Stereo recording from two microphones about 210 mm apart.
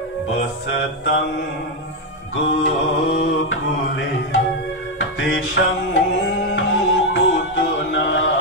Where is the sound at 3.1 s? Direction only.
65° left (ahead or behind).